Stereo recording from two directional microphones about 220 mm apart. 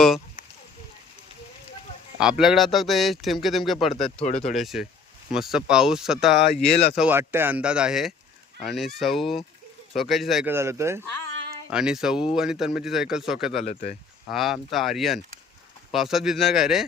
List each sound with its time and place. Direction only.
2.4 s speech: centre (ahead or behind)
4.2 s speech: 30° left (ahead or behind)
4.5 s speech: centre (ahead or behind)
6.6 s speech: 30° left (ahead or behind)
7.0 s a man's voice: 10° right (ahead or behind)
13.7 s speech: 30° left (ahead or behind)
14.3 s speech: centre (ahead or behind)